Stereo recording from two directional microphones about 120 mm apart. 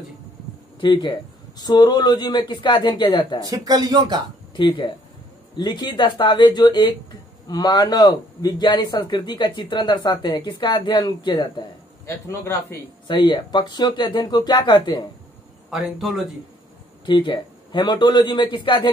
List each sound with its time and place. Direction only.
0.7 s a man's voice: 40° left (ahead or behind)
3.3 s speech: 30° right (ahead or behind)
4.6 s a man's voice: 45° left (ahead or behind)
12.3 s a man's voice: 20° left (ahead or behind)
13.0 s a man's voice: 40° left (ahead or behind)
15.7 s speech: centre (ahead or behind)
17.0 s a man's voice: 45° left (ahead or behind)